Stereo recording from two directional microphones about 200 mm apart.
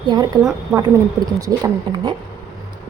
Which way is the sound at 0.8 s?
20° right (ahead or behind).